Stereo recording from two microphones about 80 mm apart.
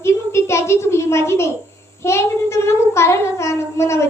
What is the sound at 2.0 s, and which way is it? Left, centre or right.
Child singing, left.